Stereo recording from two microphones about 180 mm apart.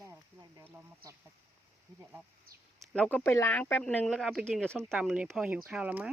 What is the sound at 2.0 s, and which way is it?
Speech, 15° right (ahead or behind).